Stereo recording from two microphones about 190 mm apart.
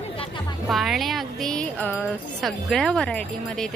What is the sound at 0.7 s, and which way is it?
Speech, centre (ahead or behind).